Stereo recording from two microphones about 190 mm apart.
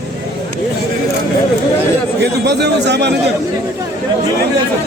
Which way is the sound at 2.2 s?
60° right (ahead or behind).